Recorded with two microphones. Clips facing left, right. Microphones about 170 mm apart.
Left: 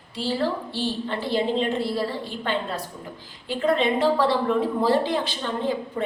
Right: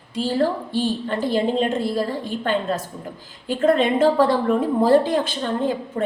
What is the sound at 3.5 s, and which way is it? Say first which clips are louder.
A woman's voice: right 4 dB; 45° right (ahead or behind).